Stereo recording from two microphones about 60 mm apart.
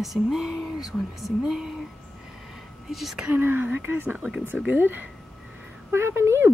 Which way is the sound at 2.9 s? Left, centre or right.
Centre.